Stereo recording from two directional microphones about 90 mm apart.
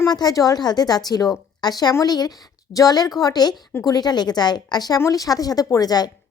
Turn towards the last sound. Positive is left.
turn(degrees=45)  # may be behind; listen again after turning